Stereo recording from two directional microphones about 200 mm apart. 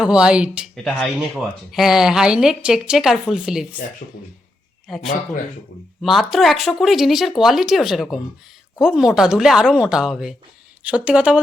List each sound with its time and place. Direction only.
0.0 s speech: 5° right (ahead or behind)
4.9 s speech: centre (ahead or behind)